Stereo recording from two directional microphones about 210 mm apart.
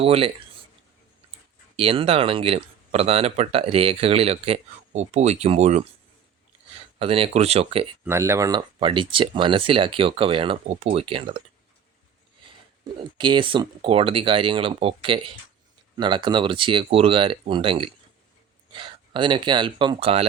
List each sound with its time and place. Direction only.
0.0 s speech: 30° right (ahead or behind)
1.7 s speech: 25° right (ahead or behind)
7.0 s speech: 25° right (ahead or behind)
8.0 s speech: 10° right (ahead or behind)
13.1 s speech: 20° right (ahead or behind)